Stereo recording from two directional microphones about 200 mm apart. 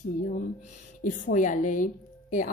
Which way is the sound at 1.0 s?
40° left (ahead or behind).